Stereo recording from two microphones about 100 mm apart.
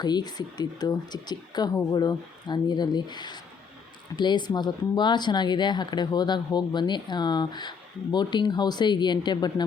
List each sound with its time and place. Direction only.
0.0 s speech: 45° left (ahead or behind)